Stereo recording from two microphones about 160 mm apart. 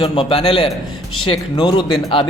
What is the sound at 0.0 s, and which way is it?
A man's voice, 35° left (ahead or behind).